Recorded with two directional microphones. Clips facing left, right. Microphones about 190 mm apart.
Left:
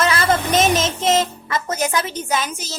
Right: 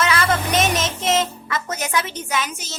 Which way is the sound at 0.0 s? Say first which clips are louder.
Left 1 dB; 35° left (ahead or behind).